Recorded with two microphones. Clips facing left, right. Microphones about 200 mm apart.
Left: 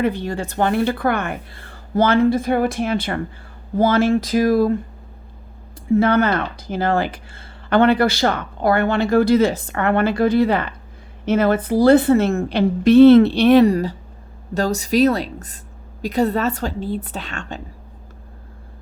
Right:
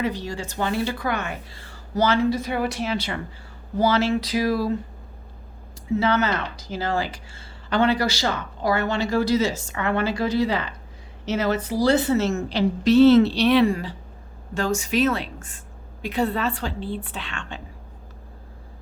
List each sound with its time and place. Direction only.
0.0 s speech: 55° left (ahead or behind)
5.9 s a woman's voice: 55° left (ahead or behind)